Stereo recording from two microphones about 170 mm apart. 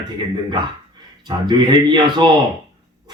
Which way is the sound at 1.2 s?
25° right (ahead or behind).